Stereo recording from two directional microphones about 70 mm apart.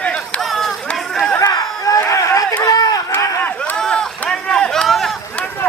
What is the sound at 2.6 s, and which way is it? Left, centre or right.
Run, left.